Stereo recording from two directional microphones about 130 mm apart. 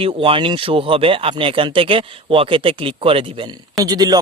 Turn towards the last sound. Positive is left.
turn(degrees=-30)  # may be behind; listen again after turning